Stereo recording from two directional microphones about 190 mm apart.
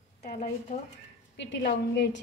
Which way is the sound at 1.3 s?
65° left (ahead or behind).